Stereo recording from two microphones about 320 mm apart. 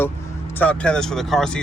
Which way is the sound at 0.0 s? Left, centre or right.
Centre.